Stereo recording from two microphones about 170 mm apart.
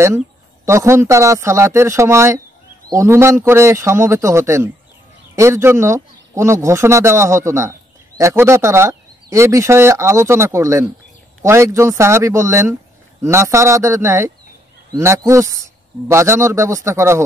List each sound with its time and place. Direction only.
0.7 s speech: 15° right (ahead or behind)